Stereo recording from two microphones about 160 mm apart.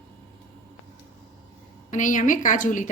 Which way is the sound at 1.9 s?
50° left (ahead or behind).